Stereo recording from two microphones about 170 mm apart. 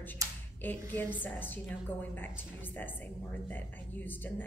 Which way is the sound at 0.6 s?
10° left (ahead or behind).